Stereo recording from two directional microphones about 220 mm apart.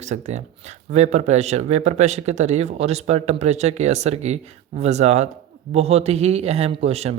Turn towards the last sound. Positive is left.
turn(degrees=-30)  # may be behind; listen again after turning